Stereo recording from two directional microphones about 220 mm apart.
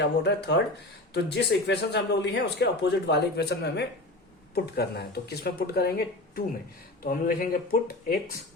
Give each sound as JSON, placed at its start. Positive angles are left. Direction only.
{"t": 0.0, "sound": "a man's voice", "side_deg": 50}
{"t": 7.0, "sound": "speech", "side_deg": 40}